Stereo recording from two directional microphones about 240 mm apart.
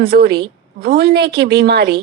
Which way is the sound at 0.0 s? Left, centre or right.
Right.